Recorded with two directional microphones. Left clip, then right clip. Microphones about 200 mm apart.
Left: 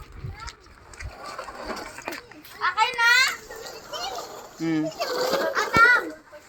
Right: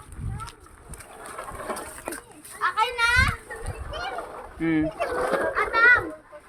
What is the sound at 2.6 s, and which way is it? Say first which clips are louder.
Children playing: left 1 dB; 40° left (ahead or behind).